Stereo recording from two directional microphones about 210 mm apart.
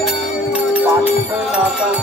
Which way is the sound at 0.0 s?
5° right (ahead or behind).